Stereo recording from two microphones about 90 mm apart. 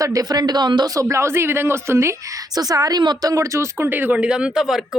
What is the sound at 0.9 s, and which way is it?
A woman's voice, 30° right (ahead or behind).